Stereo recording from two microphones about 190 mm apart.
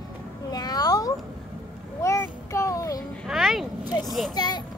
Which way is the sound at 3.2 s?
Centre (ahead or behind).